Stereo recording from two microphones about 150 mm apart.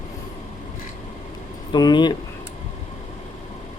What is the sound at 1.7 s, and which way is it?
Speech, 30° left (ahead or behind).